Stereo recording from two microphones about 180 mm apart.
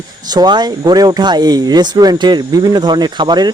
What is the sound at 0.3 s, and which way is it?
Speech, 25° right (ahead or behind).